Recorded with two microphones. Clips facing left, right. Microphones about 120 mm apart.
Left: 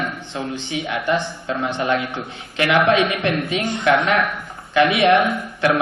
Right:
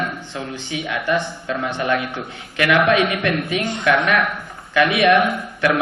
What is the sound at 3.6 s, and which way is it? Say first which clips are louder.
Speech: even; 20° right (ahead or behind).